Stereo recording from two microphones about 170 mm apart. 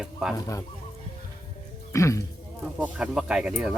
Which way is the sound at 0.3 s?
20° left (ahead or behind).